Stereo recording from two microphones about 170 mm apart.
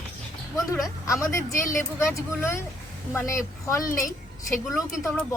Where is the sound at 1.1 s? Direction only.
20° left (ahead or behind).